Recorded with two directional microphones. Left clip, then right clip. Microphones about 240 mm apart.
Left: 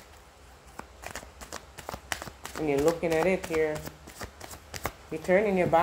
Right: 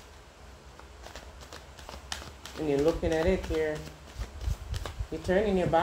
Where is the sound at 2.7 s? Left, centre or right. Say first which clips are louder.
Left 1 dB; left.